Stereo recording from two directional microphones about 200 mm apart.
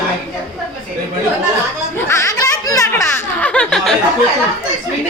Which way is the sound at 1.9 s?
15° left (ahead or behind).